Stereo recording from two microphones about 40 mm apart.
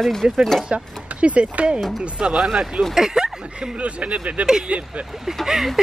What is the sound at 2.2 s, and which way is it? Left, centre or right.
Speech, right.